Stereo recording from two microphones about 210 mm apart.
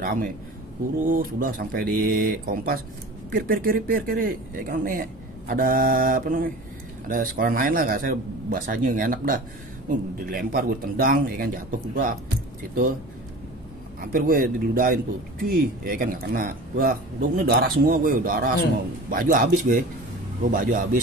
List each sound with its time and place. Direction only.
0.0 s speech: 40° right (ahead or behind)
14.0 s speech: 45° right (ahead or behind)